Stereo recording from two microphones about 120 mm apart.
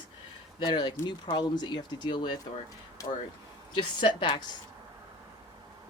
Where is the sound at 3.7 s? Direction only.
40° left (ahead or behind).